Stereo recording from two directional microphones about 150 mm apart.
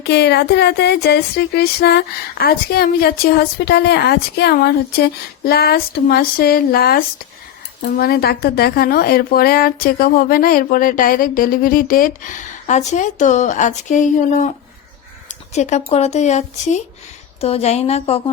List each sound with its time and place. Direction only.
0.0 s a woman's voice: 90° left; by 14.5 s 55° left (ahead or behind)
15.3 s crow: 55° left (ahead or behind)
15.9 s a woman's voice: 45° left (ahead or behind)